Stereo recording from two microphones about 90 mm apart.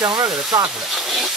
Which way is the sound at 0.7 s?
5° right (ahead or behind).